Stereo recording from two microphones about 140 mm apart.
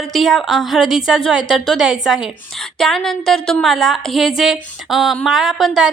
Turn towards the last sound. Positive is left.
turn(degrees=0)  # may be behind; listen again after turning